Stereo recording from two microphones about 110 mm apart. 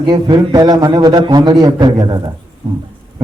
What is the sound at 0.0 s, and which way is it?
A man's voice, 40° right (ahead or behind).